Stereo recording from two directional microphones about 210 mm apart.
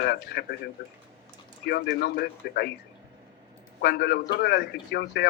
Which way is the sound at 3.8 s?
50° left (ahead or behind).